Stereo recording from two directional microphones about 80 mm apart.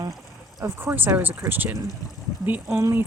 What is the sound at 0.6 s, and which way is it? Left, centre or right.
Speech, right.